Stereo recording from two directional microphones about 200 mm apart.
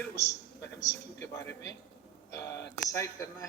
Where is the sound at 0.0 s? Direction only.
15° left (ahead or behind).